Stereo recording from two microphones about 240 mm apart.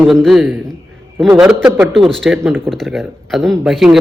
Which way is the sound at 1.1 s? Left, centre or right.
Centre.